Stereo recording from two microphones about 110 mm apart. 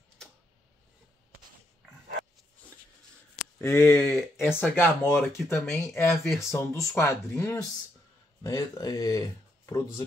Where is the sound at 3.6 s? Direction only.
20° left (ahead or behind).